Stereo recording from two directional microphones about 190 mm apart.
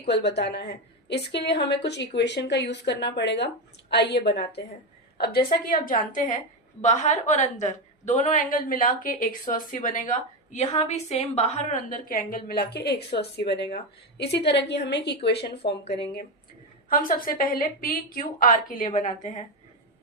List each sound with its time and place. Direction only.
0.0 s a woman's voice: 60° left (ahead or behind)
16.9 s a woman's voice: 45° left (ahead or behind)